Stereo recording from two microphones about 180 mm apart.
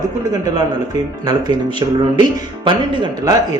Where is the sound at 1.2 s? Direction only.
25° right (ahead or behind).